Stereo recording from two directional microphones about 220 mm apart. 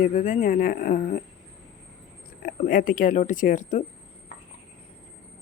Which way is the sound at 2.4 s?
40° left (ahead or behind).